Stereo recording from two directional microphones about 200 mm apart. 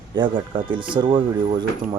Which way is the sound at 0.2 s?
25° right (ahead or behind).